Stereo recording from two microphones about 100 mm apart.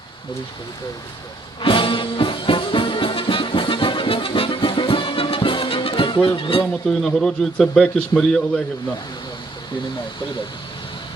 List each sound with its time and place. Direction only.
1.6 s music: 60° left (ahead or behind)
7.0 s a man's voice: 5° left (ahead or behind)